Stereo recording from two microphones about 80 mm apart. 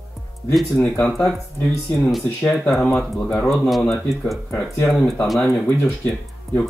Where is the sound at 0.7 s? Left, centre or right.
Left.